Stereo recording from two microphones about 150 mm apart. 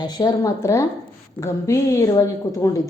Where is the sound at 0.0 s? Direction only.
30° left (ahead or behind).